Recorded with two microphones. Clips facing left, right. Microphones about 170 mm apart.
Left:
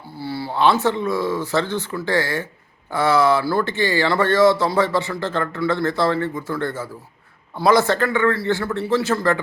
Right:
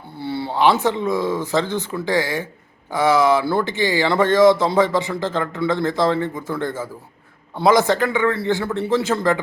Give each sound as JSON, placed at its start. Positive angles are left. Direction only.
{"t": 0.2, "sound": "speech", "side_deg": -25}